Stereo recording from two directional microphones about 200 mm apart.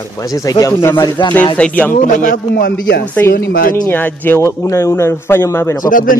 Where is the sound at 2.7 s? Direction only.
55° left (ahead or behind).